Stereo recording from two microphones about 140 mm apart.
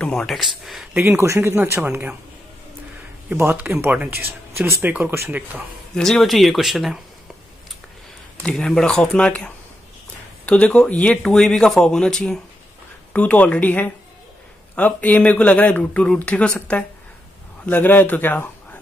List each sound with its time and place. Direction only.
0.0 s speech: 5° left (ahead or behind)
0.9 s speech: 15° right (ahead or behind)
3.3 s speech: 15° right (ahead or behind)
5.9 s speech: 5° left (ahead or behind)
8.4 s speech: 5° left (ahead or behind)